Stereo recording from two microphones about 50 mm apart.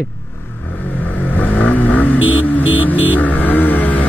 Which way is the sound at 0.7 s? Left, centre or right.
Left.